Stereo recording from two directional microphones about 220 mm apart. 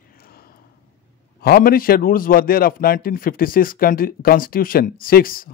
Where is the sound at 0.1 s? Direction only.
45° left (ahead or behind).